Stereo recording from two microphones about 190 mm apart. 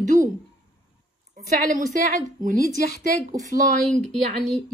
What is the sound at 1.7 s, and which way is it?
Speech, 40° right (ahead or behind).